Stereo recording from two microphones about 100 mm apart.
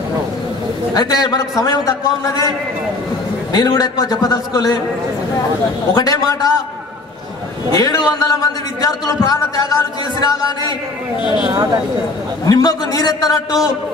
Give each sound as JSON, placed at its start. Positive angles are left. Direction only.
{"t": 0.9, "sound": "a man's voice", "side_deg": 40}
{"t": 3.5, "sound": "a man's voice", "side_deg": 40}
{"t": 5.9, "sound": "a man's voice", "side_deg": 40}
{"t": 7.7, "sound": "a man's voice", "side_deg": 40}
{"t": 12.4, "sound": "a man's voice", "side_deg": 40}